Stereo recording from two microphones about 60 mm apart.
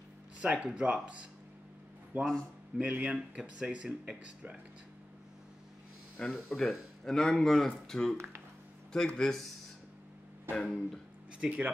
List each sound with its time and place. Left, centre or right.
0.4 s speech: right
2.1 s speech: right
6.3 s speech: centre
10.5 s speech: centre
11.3 s speech: centre